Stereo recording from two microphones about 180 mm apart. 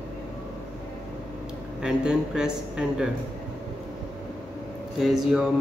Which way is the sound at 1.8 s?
5° right (ahead or behind).